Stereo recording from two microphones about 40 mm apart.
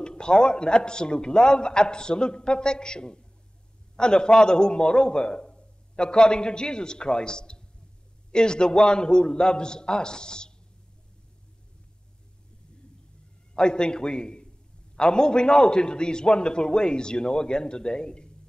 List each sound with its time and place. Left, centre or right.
0.0 s a man's voice: left
13.6 s a man's voice: centre